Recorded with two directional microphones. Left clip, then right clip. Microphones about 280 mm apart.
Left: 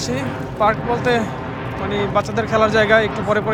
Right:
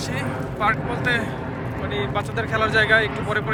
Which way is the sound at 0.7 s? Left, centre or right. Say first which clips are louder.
Left 7 dB; centre.